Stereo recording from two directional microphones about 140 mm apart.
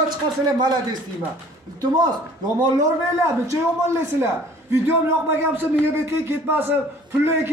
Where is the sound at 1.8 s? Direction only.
30° right (ahead or behind).